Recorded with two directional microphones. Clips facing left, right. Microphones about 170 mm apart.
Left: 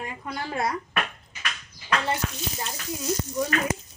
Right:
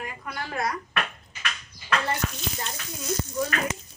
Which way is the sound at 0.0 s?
25° left (ahead or behind).